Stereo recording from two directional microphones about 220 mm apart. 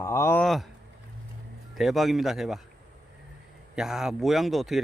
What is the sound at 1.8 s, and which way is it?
Speech, centre (ahead or behind).